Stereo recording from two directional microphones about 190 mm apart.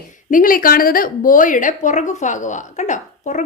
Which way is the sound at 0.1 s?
45° left (ahead or behind).